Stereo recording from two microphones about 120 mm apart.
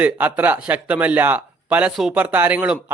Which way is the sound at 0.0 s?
15° right (ahead or behind).